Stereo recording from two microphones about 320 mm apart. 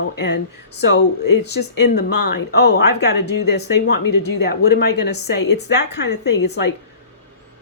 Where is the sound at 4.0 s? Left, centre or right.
Left.